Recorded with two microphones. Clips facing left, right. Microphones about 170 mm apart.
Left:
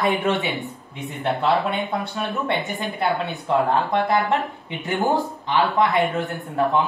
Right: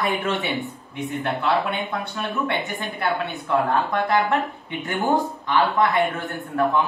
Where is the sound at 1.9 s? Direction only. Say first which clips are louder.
Left 2 dB; 20° left (ahead or behind).